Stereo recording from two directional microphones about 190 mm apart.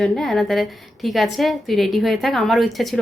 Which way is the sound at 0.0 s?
Centre (ahead or behind).